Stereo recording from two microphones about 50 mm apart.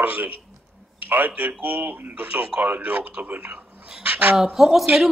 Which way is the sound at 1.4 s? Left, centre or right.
Right.